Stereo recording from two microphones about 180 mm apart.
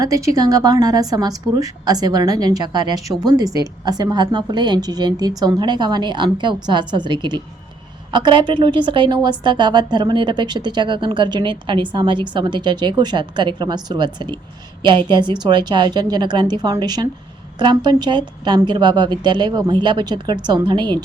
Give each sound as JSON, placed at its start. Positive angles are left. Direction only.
{"t": 0.0, "sound": "a woman's voice", "side_deg": -20}